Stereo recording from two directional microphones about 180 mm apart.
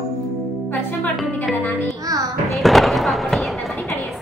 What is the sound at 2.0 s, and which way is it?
Speech, 20° right (ahead or behind).